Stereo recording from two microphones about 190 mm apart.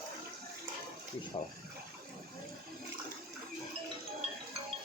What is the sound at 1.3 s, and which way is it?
Speech, 25° left (ahead or behind).